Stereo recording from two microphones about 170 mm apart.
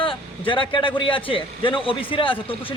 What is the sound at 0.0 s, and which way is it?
A man's voice, 30° left (ahead or behind).